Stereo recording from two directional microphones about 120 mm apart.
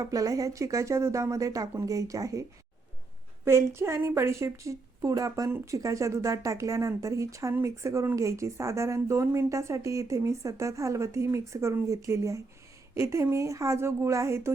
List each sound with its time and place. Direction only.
0.0 s speech: 30° right (ahead or behind)
3.4 s speech: 20° right (ahead or behind)